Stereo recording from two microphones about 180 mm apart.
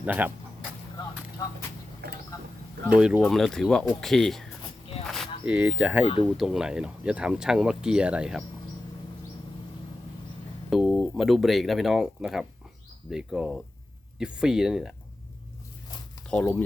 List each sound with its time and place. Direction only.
0.0 s speech: 10° right (ahead or behind)
2.0 s a sound: 65° right (ahead or behind)
2.9 s speech: 5° right (ahead or behind)
10.7 s speech: centre (ahead or behind)
16.3 s speech: 10° left (ahead or behind)